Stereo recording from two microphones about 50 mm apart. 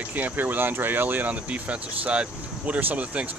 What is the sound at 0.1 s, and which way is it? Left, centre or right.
Speech, right.